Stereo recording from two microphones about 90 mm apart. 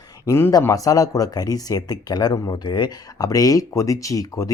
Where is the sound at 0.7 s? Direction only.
40° left (ahead or behind).